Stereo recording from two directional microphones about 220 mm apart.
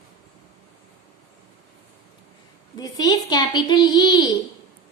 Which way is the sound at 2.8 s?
20° left (ahead or behind).